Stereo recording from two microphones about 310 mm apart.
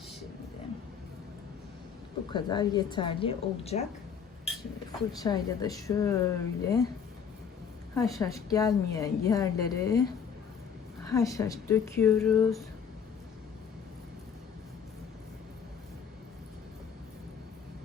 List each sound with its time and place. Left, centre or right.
2.3 s a woman's voice: centre
5.2 s a woman's voice: centre
8.1 s a woman's voice: centre